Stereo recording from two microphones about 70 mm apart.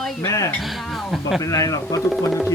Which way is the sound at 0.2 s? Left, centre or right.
Left.